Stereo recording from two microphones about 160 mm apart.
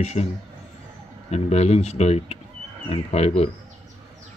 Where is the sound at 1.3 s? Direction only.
40° left (ahead or behind).